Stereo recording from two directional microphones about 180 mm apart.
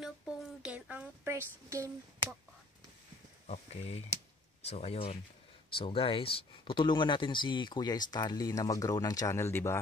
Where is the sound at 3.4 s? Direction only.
40° left (ahead or behind).